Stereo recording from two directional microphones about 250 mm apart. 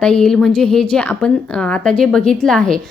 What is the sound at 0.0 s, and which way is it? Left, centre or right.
A woman's voice, centre.